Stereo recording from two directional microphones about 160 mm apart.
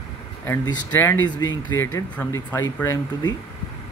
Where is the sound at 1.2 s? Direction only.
25° left (ahead or behind).